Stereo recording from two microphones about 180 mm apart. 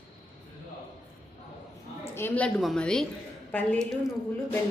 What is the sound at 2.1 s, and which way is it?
A woman's voice, 10° left (ahead or behind).